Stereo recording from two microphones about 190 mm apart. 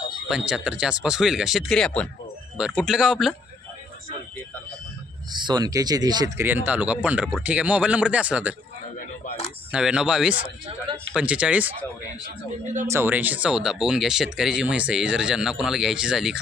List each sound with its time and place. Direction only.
0.3 s speech: 5° right (ahead or behind)
5.3 s speech: 25° right (ahead or behind); by 8.5 s 5° right (ahead or behind)
9.7 s speech: 5° right (ahead or behind)
12.9 s speech: 10° right (ahead or behind)